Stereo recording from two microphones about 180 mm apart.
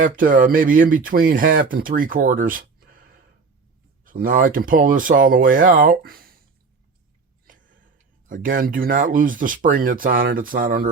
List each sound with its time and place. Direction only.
0.0 s speech: 50° right (ahead or behind)
7.4 s a sound: 50° right (ahead or behind)
8.3 s speech: 50° right (ahead or behind)